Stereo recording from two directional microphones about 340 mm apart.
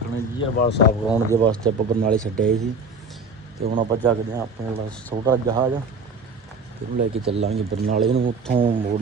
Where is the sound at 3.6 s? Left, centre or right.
Right.